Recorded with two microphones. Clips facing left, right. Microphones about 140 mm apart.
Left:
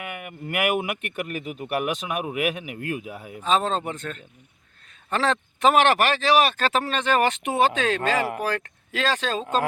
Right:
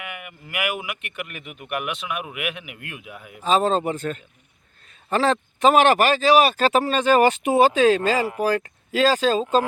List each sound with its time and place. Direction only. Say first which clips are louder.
0.0 s speech: left 3 dB; 40° left (ahead or behind)
3.4 s speech: right 4 dB; 5° right (ahead or behind)